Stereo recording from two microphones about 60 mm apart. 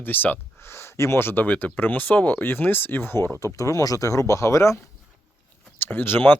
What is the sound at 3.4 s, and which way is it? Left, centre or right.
Speech, left.